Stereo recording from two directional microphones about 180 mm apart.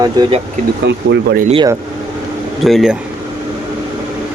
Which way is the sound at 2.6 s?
Centre (ahead or behind).